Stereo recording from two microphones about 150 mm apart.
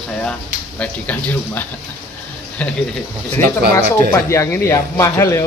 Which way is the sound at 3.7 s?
20° left (ahead or behind).